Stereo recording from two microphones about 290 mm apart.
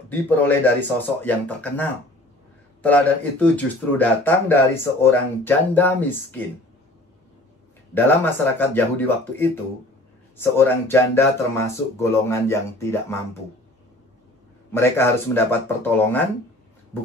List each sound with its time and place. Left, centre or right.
0.1 s speech: centre
7.9 s speech: centre
14.7 s speech: centre